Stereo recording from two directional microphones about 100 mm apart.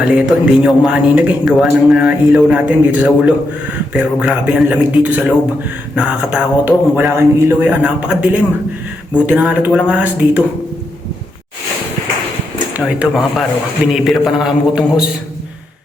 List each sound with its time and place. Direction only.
0.0 s a man's voice: 10° right (ahead or behind)
6.9 s a man's voice: 25° right (ahead or behind)
12.9 s a man's voice: 10° right (ahead or behind)
13.9 s a man's voice: centre (ahead or behind)